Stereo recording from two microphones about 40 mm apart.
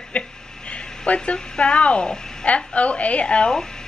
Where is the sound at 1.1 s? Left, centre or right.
Left.